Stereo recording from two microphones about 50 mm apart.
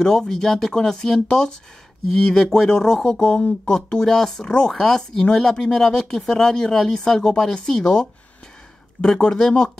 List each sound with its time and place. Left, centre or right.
0.0 s speech: centre
4.0 s speech: centre
4.7 s speech: centre